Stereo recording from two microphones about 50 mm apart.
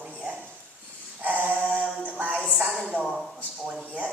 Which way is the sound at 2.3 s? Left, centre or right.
Centre.